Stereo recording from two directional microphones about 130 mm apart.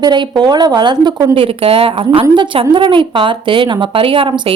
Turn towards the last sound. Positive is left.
turn(degrees=-40)  # may be behind; listen again after turning